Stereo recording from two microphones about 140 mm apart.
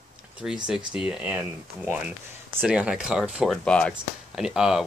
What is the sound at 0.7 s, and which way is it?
Speech, 5° right (ahead or behind).